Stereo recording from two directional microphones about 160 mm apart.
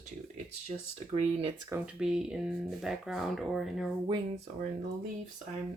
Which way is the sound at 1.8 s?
5° right (ahead or behind).